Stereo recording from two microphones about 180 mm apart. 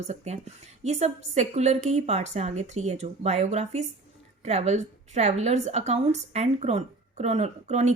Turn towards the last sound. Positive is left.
turn(degrees=-40)  # may be behind; listen again after turning